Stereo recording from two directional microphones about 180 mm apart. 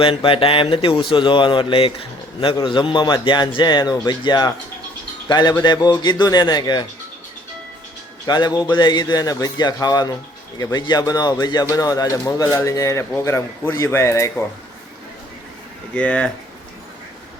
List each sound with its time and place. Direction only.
0.0 s speech: 30° left (ahead or behind)
8.3 s speech: 25° left (ahead or behind)
16.0 s speech: 5° left (ahead or behind)